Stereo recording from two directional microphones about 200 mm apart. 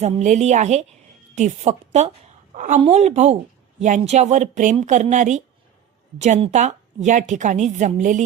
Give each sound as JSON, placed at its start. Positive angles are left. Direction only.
{"t": 0.0, "sound": "a woman's voice", "side_deg": -35}